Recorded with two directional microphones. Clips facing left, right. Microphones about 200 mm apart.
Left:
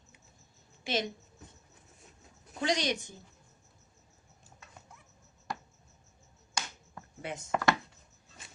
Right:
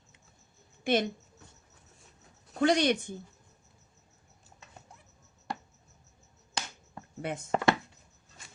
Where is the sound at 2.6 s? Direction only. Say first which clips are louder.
Right 6 dB; 55° right (ahead or behind).